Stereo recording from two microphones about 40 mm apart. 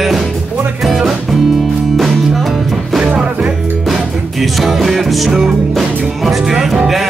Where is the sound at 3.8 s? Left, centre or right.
Centre.